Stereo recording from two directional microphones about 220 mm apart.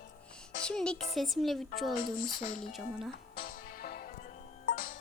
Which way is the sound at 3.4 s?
40° left (ahead or behind).